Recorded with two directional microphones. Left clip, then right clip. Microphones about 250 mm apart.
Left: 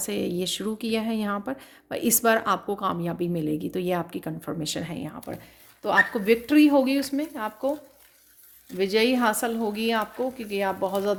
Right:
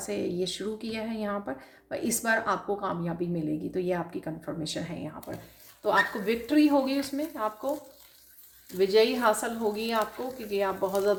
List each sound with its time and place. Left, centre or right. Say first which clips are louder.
0.0 s speech: left 2 dB; left
8.8 s speech: left 1 dB; left